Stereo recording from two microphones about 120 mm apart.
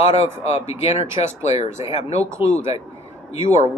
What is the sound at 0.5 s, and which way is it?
Speech, 65° left (ahead or behind).